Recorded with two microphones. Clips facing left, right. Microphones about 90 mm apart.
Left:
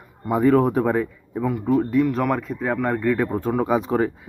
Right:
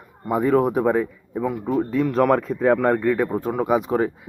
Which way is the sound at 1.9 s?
35° right (ahead or behind).